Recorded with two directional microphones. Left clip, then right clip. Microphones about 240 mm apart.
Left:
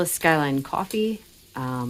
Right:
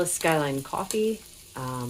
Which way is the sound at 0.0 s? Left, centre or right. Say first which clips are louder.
Left 3 dB; left.